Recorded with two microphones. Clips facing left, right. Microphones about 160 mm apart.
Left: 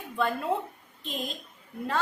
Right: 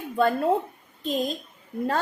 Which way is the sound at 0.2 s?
40° right (ahead or behind).